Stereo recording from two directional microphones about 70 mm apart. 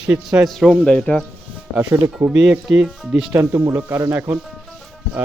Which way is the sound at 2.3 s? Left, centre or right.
Centre.